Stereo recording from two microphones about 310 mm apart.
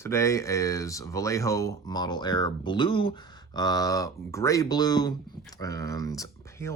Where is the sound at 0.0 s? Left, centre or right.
Centre.